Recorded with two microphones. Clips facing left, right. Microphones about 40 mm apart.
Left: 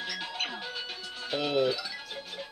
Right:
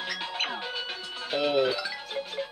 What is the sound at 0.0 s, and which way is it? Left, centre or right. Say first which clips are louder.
Music: right 3 dB; right.